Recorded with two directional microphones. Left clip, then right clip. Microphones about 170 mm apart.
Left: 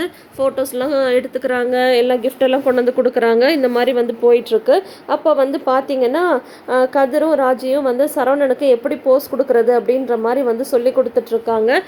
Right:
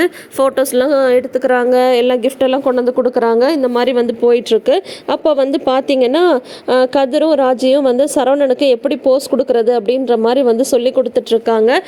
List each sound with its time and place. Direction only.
0.3 s a woman's voice: 55° right (ahead or behind); by 1.6 s 25° right (ahead or behind)
1.7 s a woman's voice: 35° right (ahead or behind)
2.6 s speech: 25° right (ahead or behind)
3.8 s a woman's voice: 35° right (ahead or behind)